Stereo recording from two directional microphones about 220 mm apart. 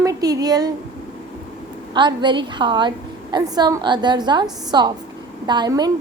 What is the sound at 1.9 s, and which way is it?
A woman's voice, 20° right (ahead or behind).